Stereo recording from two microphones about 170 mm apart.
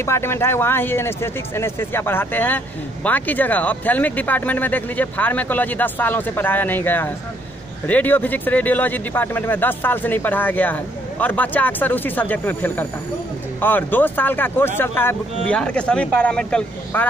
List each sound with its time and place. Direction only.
0.0 s speech: 15° left (ahead or behind)